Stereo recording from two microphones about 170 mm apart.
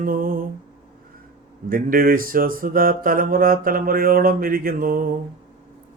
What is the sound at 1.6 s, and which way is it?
Speech, 55° right (ahead or behind).